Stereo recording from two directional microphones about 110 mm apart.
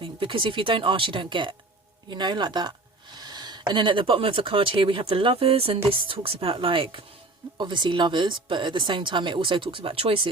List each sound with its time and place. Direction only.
0.0 s speech: 50° right (ahead or behind)